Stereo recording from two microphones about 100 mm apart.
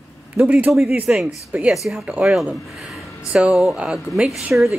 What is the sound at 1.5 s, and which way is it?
A woman's voice, 15° right (ahead or behind).